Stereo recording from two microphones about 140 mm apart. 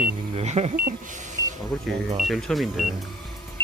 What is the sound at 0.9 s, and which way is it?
Speech, 65° right (ahead or behind).